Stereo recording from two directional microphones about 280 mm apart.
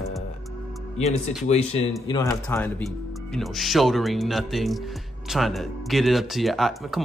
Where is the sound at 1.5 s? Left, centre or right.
Left.